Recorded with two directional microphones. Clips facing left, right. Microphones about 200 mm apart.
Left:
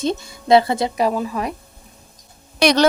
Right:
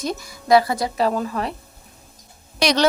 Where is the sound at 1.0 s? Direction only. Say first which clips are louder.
Left 1 dB; 10° left (ahead or behind).